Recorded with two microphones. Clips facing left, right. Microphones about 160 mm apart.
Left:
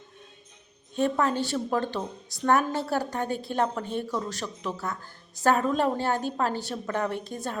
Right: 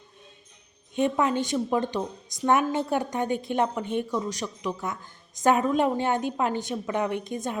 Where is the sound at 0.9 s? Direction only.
15° right (ahead or behind).